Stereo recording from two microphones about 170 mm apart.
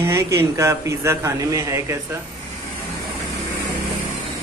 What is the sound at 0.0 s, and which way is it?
A man's voice, 15° right (ahead or behind).